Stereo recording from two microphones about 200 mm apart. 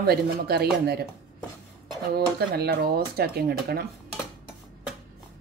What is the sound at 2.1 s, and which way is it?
Speech, 50° right (ahead or behind).